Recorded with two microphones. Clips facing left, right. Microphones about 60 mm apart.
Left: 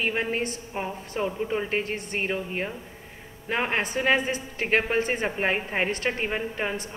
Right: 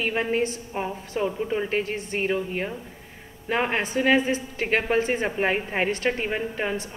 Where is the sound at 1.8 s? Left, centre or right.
Left.